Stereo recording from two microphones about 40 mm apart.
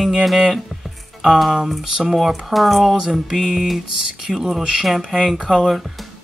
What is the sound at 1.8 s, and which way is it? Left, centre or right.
Speech, centre.